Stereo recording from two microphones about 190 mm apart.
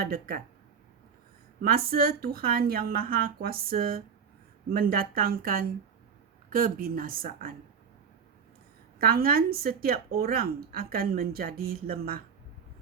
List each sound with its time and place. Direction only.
0.0 s a woman's voice: 50° right (ahead or behind)
1.6 s a woman's voice: 50° right (ahead or behind)
9.0 s a woman's voice: 50° right (ahead or behind)